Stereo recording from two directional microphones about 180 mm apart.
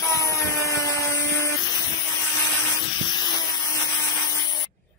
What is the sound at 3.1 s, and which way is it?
Vacuum cleaner, 25° left (ahead or behind).